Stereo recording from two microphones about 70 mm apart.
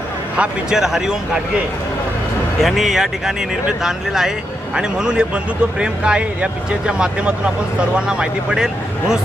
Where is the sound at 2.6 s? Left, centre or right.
Centre.